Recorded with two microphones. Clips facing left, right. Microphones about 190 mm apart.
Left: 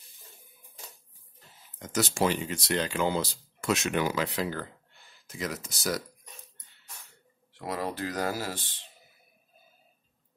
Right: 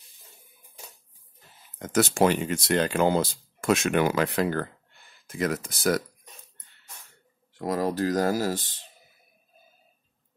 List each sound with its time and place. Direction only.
1.8 s speech: 55° right (ahead or behind)
7.5 s speech: 45° right (ahead or behind)